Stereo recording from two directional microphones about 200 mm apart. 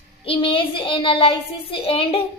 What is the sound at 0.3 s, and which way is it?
A child's voice, 25° left (ahead or behind).